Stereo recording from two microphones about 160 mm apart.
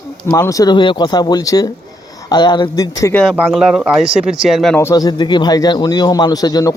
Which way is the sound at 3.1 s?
Centre (ahead or behind).